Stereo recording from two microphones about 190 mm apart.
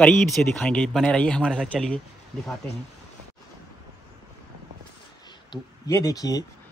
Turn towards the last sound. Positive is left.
turn(degrees=20)  # may be behind; listen again after turning